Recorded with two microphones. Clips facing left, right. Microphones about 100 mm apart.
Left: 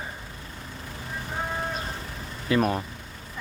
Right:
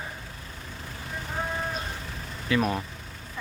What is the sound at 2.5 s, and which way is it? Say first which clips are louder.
Speech: left 2 dB; 35° left (ahead or behind).